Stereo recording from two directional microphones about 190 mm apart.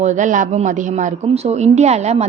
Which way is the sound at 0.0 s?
40° right (ahead or behind).